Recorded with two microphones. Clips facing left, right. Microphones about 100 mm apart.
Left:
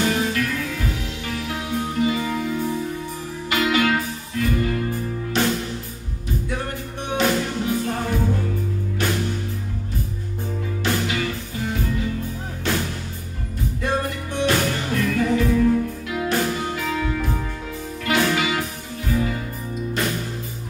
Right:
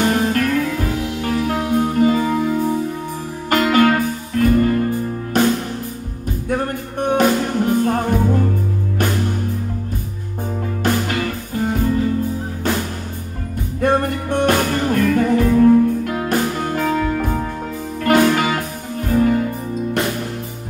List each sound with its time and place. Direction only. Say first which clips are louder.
0.0 s music: right 5 dB; 45° right (ahead or behind)
6.5 s music: right 7 dB; 45° right (ahead or behind)
10.8 s music: right 4 dB; 45° right (ahead or behind)
13.7 s music: right 8 dB; 50° right (ahead or behind)